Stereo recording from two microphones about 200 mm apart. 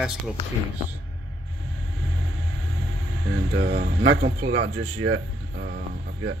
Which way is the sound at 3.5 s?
65° right (ahead or behind).